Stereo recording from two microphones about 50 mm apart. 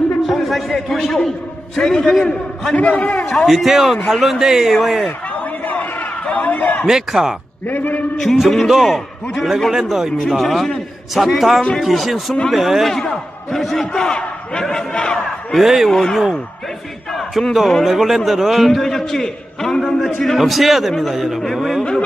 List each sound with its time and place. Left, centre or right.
0.2 s a man's voice: centre
2.7 s a man's voice: left
3.3 s a man's voice: centre
5.3 s a sound: left
6.9 s a man's voice: centre
7.6 s a man's voice: left
8.4 s a man's voice: centre
10.1 s a man's voice: centre
12.9 s a man's voice: centre
14.0 s a man's voice: centre
15.5 s a man's voice: centre
15.9 s a man's voice: centre